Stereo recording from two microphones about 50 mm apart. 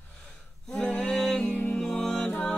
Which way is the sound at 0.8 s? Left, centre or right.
Left.